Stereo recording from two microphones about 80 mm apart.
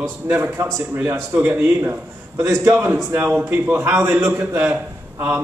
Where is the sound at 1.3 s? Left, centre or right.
Right.